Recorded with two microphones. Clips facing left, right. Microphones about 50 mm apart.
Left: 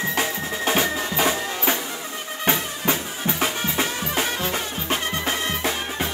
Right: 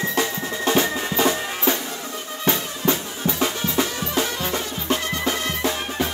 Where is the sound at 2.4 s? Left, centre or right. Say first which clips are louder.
Right 1 dB; left.